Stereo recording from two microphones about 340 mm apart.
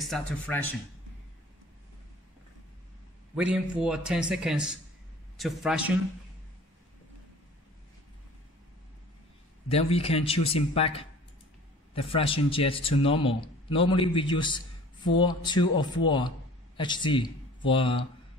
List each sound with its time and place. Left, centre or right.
0.0 s speech: centre
3.3 s speech: centre
9.7 s a man's voice: centre